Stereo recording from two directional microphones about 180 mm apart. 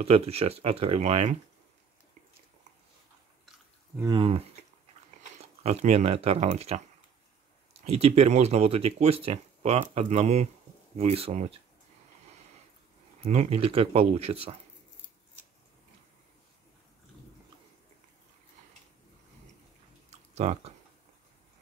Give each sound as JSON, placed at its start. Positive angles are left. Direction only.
{"t": 0.0, "sound": "speech", "side_deg": -35}
{"t": 4.0, "sound": "speech", "side_deg": -25}
{"t": 7.8, "sound": "speech", "side_deg": -35}
{"t": 13.2, "sound": "speech", "side_deg": -35}
{"t": 20.1, "sound": "chewing", "side_deg": -35}